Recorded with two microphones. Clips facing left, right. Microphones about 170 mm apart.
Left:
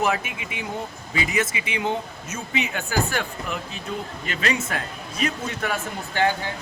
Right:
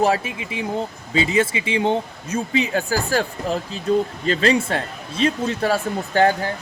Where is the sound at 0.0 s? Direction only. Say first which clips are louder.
Right 5 dB; 30° right (ahead or behind).